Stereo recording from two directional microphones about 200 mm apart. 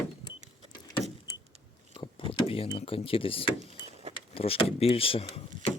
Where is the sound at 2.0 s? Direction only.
25° left (ahead or behind).